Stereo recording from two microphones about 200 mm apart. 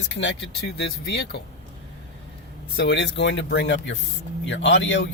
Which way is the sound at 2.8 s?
60° left (ahead or behind).